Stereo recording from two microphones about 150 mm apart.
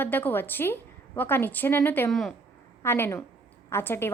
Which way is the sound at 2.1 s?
Centre (ahead or behind).